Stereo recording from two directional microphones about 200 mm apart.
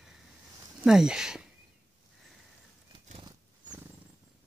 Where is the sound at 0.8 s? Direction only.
5° right (ahead or behind).